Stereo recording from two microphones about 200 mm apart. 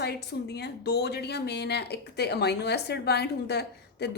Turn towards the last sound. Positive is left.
turn(degrees=55)  # may be behind; listen again after turning